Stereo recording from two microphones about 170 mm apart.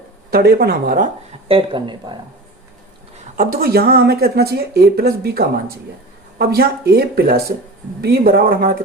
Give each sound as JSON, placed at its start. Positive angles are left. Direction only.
{"t": 0.3, "sound": "speech", "side_deg": -65}
{"t": 1.5, "sound": "speech", "side_deg": -30}
{"t": 3.3, "sound": "speech", "side_deg": -55}